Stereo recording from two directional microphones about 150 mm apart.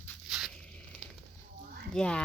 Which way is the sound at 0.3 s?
Centre (ahead or behind).